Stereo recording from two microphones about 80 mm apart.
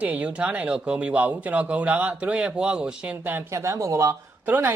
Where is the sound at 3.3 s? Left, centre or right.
Right.